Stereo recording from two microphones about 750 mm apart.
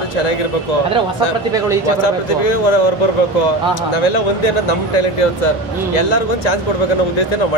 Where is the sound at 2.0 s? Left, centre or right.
Left.